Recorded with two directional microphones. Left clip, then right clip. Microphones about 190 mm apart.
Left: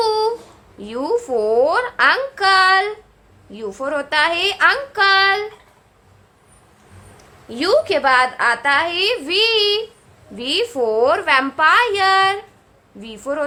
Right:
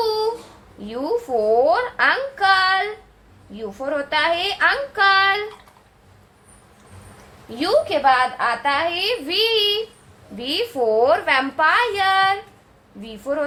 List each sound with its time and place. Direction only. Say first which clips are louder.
0.0 s a sound: left 3 dB; 25° left (ahead or behind)
0.8 s a woman's voice: left 3 dB; 25° left (ahead or behind)
7.6 s a woman's voice: left 2 dB; 35° left (ahead or behind); by 13.4 s 20° left (ahead or behind)